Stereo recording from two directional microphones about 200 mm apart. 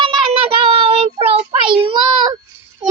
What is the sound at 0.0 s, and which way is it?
Child singing, 25° right (ahead or behind).